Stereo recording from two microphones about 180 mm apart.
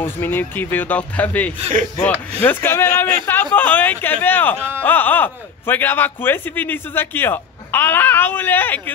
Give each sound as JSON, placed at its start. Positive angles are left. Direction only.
{"t": 0.0, "sound": "a man's voice", "side_deg": 10}
{"t": 1.6, "sound": "speech", "side_deg": -40}
{"t": 2.4, "sound": "a man's voice", "side_deg": 10}